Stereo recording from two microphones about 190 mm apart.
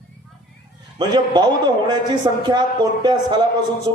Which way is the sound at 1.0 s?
20° right (ahead or behind).